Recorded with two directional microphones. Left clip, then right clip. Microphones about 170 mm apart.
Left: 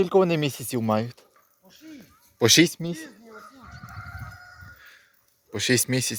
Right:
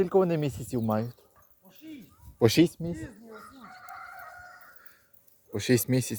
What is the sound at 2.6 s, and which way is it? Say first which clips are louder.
Speech: left 4 dB; 20° left (ahead or behind).